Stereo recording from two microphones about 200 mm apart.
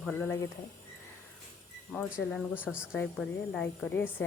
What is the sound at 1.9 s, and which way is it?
A woman's voice, 5° left (ahead or behind).